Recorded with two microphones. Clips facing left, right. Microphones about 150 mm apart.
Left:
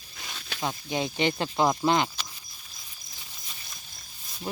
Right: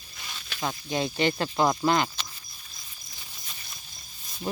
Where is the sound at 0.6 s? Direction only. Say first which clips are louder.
Right 1 dB; 15° left (ahead or behind).